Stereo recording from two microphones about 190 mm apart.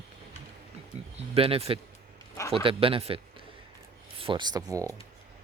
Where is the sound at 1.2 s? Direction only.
30° right (ahead or behind).